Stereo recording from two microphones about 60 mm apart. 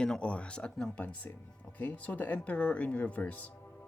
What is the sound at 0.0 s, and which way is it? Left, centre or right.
Speech, centre.